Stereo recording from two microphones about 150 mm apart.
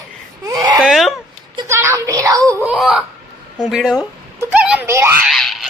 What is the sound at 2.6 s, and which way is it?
Speech, 5° right (ahead or behind).